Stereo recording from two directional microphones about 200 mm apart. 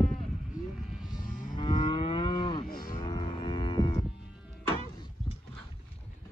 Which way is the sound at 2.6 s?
45° left (ahead or behind).